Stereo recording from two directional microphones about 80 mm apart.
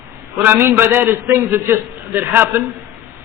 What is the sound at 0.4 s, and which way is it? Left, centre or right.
A man's voice, right.